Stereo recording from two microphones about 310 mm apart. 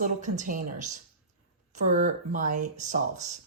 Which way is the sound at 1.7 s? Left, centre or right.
Right.